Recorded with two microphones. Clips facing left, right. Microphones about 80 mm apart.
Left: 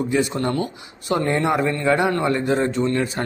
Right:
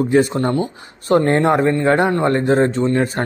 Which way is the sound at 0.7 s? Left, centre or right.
Right.